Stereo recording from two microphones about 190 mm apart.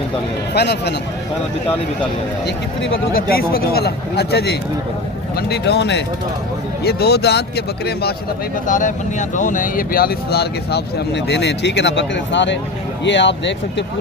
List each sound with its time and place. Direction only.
0.5 s speech: 60° left (ahead or behind)
3.1 s speech: 50° left (ahead or behind)
8.6 s speech: 40° left (ahead or behind); by 13.8 s 70° left (ahead or behind)